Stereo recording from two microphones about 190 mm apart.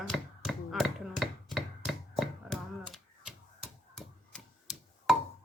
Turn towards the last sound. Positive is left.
turn(degrees=0)  # may be behind; listen again after turning